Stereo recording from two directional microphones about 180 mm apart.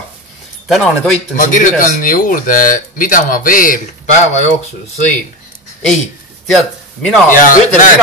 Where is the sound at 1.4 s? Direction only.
45° left (ahead or behind).